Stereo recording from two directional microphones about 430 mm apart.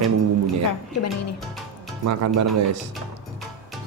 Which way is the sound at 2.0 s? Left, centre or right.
Right.